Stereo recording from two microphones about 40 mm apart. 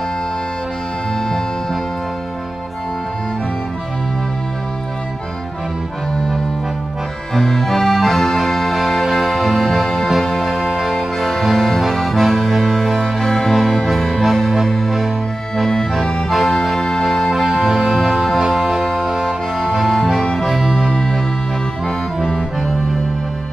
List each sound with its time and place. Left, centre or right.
6.1 s accordion: centre
7.3 s music: centre
11.8 s accordion: centre
13.2 s music: centre
15.5 s accordion: centre
16.6 s music: centre
17.3 s music: centre
19.9 s music: centre
20.4 s music: centre
20.9 s music: centre